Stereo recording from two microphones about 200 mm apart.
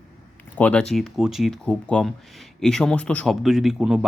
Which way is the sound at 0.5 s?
5° left (ahead or behind).